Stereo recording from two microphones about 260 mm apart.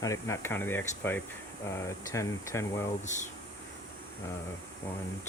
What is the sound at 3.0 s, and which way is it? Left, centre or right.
Speech, left.